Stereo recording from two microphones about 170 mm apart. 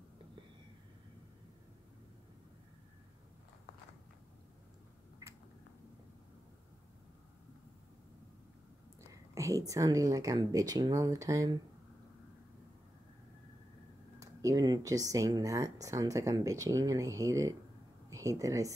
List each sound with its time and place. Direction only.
5.2 s a sound: 20° right (ahead or behind)
9.1 s speech: 20° right (ahead or behind)
14.2 s speech: 20° right (ahead or behind)